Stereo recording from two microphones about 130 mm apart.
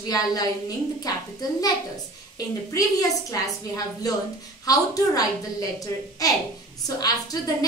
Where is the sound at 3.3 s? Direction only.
30° left (ahead or behind).